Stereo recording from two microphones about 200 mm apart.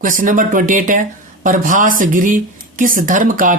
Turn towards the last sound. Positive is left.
turn(degrees=-40)  # may be behind; listen again after turning